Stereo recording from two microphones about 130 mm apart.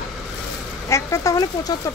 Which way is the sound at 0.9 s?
25° left (ahead or behind).